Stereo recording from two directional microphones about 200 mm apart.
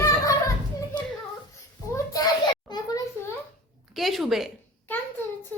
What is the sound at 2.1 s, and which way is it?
Children playing, 20° left (ahead or behind).